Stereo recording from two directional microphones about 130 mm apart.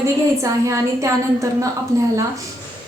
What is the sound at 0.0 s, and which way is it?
A woman's voice, 25° right (ahead or behind).